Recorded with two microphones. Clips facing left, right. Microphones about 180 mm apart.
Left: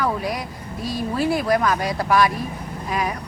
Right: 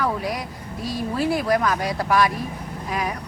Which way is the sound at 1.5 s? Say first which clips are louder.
Left 1 dB; 20° left (ahead or behind).